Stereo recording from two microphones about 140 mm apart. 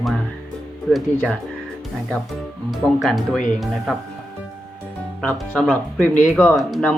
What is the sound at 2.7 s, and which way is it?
Speech, centre (ahead or behind).